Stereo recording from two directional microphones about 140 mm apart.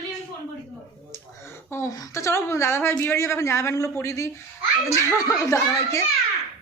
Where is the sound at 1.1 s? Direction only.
20° left (ahead or behind).